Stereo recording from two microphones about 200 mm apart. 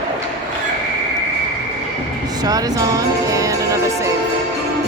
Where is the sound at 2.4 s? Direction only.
20° right (ahead or behind).